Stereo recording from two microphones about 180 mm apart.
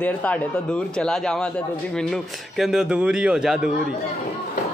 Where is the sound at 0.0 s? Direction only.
10° left (ahead or behind).